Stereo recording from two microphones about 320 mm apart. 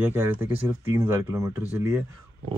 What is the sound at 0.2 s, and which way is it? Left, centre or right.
Speech, centre.